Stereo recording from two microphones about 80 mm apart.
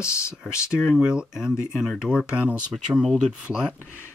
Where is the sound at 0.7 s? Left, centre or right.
Centre.